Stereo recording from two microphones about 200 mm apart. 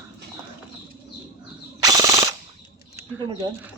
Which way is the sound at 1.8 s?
15° right (ahead or behind).